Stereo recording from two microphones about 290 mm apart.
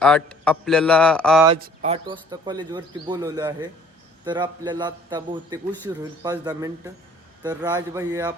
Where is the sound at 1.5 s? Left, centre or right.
Right.